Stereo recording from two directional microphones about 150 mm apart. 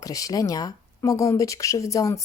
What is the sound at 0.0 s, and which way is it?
Speech, 25° left (ahead or behind).